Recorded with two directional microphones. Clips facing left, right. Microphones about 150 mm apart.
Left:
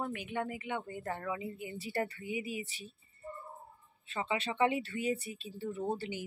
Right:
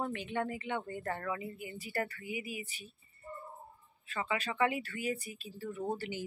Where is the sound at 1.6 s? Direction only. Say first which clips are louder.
Left 2 dB; 30° left (ahead or behind).